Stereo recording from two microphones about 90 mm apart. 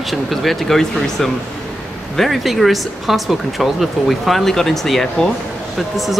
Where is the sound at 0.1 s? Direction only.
Centre (ahead or behind).